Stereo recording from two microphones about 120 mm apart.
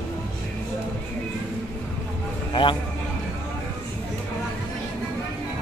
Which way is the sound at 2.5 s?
40° left (ahead or behind).